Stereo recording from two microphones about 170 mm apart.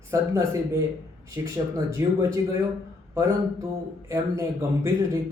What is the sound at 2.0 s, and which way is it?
Speech, 15° right (ahead or behind).